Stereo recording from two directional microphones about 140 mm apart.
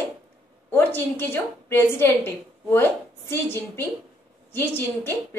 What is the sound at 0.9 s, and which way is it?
A woman's voice, 15° left (ahead or behind).